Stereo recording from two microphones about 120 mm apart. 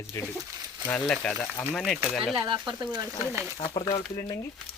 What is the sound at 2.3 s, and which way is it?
Speech, 40° right (ahead or behind).